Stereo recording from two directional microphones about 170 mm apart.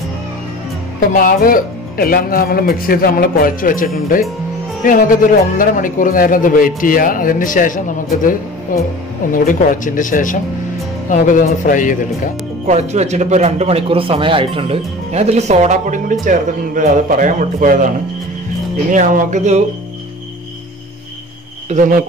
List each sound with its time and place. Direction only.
1.1 s speech: 55° left (ahead or behind)
5.6 s a man's voice: 55° left (ahead or behind)
12.6 s speech: 40° right (ahead or behind)
18.9 s speech: 50° right (ahead or behind)
21.6 s speech: 50° right (ahead or behind)